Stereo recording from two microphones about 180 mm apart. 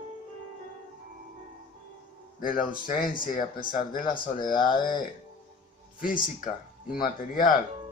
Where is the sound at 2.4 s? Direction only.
50° left (ahead or behind).